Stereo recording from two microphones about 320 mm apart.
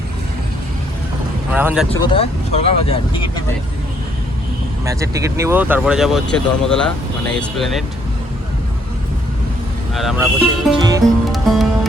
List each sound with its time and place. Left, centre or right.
1.5 s speech: centre
2.1 s speech: centre
4.9 s speech: centre
9.9 s speech: centre